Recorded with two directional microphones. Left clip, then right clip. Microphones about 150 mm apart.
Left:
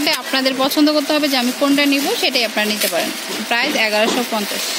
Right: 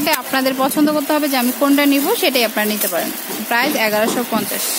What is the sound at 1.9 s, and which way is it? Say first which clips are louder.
Speech: right 1 dB; 20° right (ahead or behind).